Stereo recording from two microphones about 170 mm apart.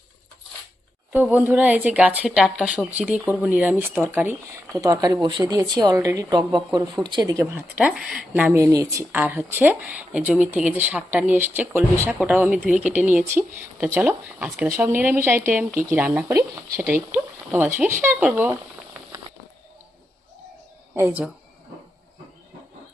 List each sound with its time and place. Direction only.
1.1 s a woman's voice: 10° right (ahead or behind)
7.8 s speech: 5° right (ahead or behind)
8.6 s speech: 20° right (ahead or behind)
20.9 s speech: 10° right (ahead or behind)